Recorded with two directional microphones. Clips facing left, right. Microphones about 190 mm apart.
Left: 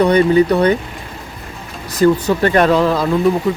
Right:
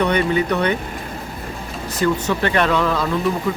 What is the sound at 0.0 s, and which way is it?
Speech, 35° left (ahead or behind).